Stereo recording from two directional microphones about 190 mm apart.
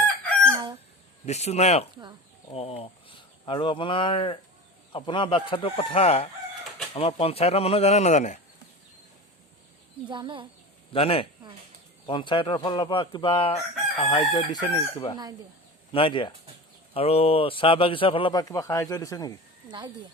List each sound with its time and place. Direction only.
0.3 s chicken: 5° left (ahead or behind)
1.2 s a man's voice: 35° left (ahead or behind)
10.1 s speech: 25° right (ahead or behind)
10.9 s a man's voice: 30° left (ahead or behind)